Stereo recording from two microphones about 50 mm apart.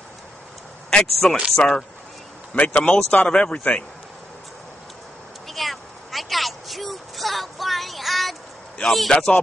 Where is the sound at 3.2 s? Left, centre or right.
Centre.